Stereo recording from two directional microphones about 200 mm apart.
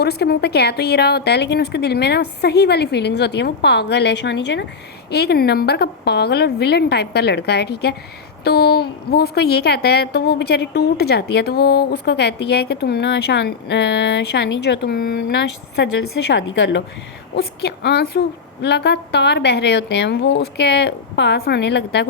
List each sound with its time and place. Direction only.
0.0 s a woman's voice: 55° left (ahead or behind)